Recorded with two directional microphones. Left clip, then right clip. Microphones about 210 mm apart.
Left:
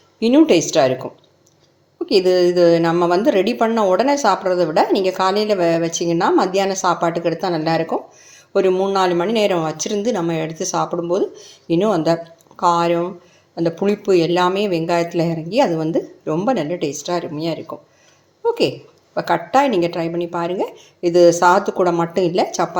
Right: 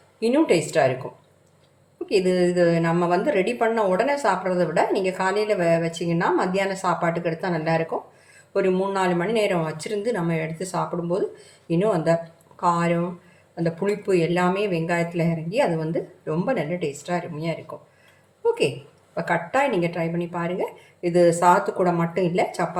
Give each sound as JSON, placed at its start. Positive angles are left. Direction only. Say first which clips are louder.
{"t": 0.2, "sound": "a woman's voice", "louder": "left 6 dB", "side_deg": 30}
{"t": 2.0, "sound": "a woman's voice", "louder": "left 6 dB", "side_deg": 35}